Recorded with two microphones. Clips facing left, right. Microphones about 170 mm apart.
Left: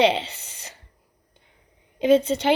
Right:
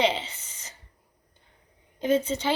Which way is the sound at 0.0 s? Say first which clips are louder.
Left 5 dB; 65° left (ahead or behind).